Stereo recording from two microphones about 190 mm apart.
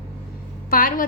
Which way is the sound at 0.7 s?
45° left (ahead or behind).